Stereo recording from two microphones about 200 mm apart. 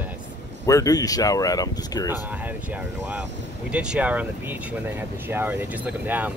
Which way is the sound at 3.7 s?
5° right (ahead or behind).